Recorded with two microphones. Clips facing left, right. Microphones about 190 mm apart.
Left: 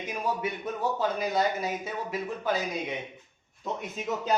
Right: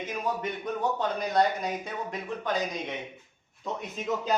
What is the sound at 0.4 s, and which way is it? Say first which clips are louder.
Speech: even; 5° left (ahead or behind).